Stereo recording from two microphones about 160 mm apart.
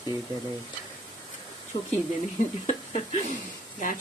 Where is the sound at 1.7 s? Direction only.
50° left (ahead or behind).